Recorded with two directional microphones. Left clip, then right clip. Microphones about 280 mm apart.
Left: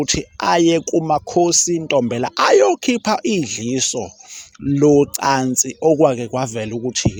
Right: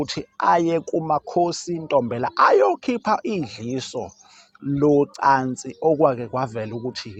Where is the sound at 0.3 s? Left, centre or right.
Left.